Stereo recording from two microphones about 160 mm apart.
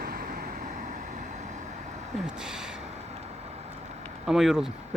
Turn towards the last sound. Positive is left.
turn(degrees=0)  # may be behind; listen again after turning